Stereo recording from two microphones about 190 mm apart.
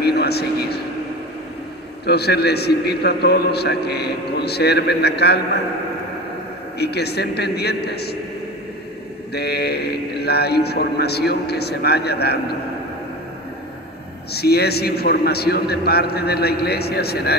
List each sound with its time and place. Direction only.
0.0 s vehicle: 60° left (ahead or behind)
2.0 s a man's voice: 60° left (ahead or behind)
6.8 s a man's voice: 60° left (ahead or behind)
9.3 s a man's voice: 60° left (ahead or behind)
14.3 s a man's voice: 55° left (ahead or behind)